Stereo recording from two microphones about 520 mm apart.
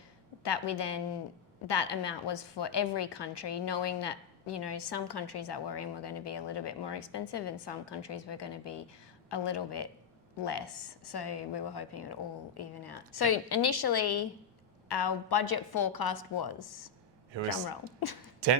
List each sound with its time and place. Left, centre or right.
0.4 s a woman's voice: left